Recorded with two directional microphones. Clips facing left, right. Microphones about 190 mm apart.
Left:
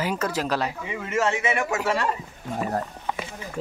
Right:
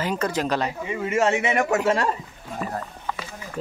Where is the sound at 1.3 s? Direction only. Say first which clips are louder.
Right 3 dB; 40° right (ahead or behind).